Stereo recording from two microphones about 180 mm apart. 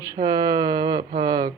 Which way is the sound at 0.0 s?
20° right (ahead or behind).